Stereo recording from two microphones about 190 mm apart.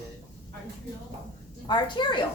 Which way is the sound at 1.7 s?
25° left (ahead or behind).